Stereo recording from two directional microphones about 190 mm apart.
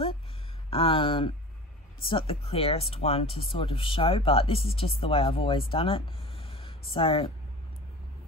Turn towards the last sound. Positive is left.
turn(degrees=30)  # may be behind; listen again after turning